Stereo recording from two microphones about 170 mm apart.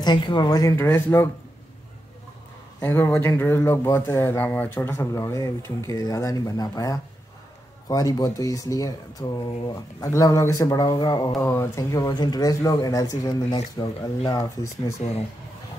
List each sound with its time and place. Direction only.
0.0 s speech: 25° left (ahead or behind)
2.8 s speech: 10° left (ahead or behind)
15.0 s speech: 40° left (ahead or behind)